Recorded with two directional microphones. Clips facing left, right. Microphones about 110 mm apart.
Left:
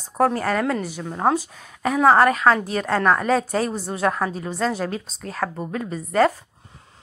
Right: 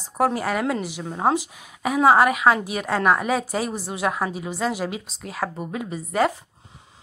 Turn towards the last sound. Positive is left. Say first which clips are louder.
# left 3 dB
turn(degrees=-15)  # may be behind; listen again after turning